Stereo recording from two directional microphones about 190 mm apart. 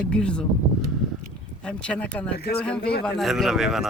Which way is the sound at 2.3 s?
55° left (ahead or behind).